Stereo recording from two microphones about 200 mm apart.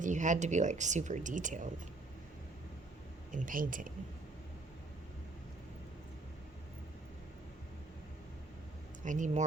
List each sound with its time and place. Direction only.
0.0 s speech: 40° right (ahead or behind)
3.3 s speech: 45° right (ahead or behind)
9.0 s speech: 40° right (ahead or behind)